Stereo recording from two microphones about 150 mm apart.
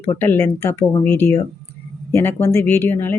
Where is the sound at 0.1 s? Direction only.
15° left (ahead or behind).